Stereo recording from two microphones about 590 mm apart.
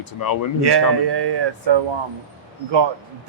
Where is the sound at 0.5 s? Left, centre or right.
Right.